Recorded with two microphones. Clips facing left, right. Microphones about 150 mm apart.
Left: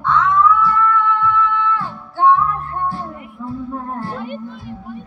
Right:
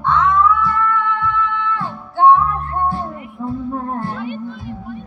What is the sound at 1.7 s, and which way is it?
Music, 20° right (ahead or behind).